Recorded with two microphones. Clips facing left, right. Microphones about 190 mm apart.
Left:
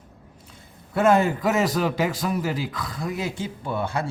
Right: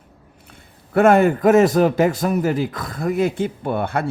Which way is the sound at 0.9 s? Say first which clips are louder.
Right 5 dB; 60° right (ahead or behind).